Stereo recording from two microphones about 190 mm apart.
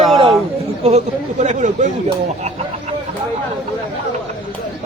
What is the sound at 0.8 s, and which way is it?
Speech, 35° right (ahead or behind).